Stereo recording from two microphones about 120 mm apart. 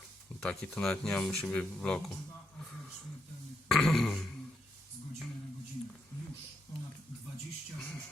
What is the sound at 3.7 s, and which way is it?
Burping, 5° left (ahead or behind).